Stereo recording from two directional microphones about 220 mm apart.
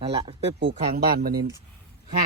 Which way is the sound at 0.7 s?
45° right (ahead or behind).